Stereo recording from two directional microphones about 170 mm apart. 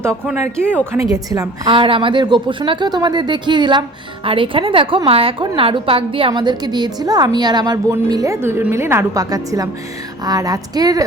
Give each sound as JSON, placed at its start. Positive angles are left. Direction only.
{"t": 1.1, "sound": "a woman's voice", "side_deg": -20}